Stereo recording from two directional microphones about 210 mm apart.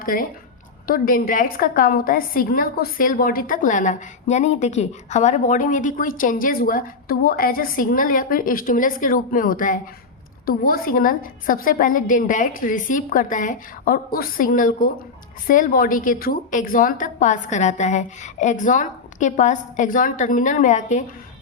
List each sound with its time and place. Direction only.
0.0 s a woman's voice: 45° left (ahead or behind)